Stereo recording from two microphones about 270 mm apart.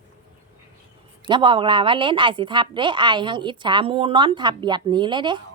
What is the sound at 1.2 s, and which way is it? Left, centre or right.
Speech, centre.